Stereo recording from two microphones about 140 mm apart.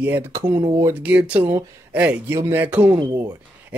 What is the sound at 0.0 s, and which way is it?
Speech, 15° right (ahead or behind).